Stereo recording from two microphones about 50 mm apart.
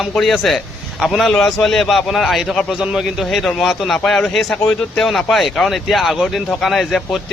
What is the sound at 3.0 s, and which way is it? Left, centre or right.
Speech, centre.